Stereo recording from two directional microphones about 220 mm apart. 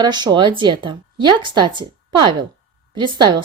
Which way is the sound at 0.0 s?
20° right (ahead or behind).